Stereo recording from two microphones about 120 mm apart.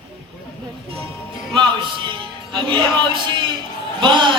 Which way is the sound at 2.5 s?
40° right (ahead or behind).